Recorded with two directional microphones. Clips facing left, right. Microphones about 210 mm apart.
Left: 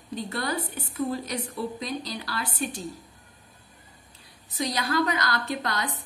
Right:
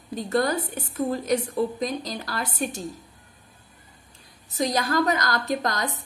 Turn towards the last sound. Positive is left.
turn(degrees=-45)  # may be behind; listen again after turning